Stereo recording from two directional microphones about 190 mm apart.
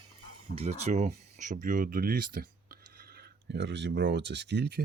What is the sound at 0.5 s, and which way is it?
Speech, 35° right (ahead or behind).